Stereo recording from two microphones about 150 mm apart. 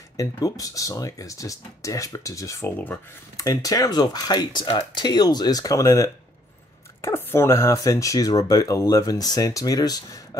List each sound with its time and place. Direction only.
0.2 s speech: 25° left (ahead or behind)
3.3 s speech: 25° left (ahead or behind)